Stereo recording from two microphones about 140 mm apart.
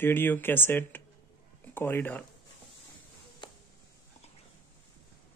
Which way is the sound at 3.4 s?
35° left (ahead or behind).